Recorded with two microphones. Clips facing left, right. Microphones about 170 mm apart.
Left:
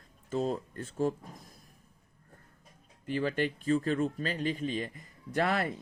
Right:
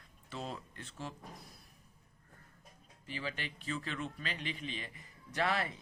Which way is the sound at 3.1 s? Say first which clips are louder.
Left 12 dB; 50° left (ahead or behind).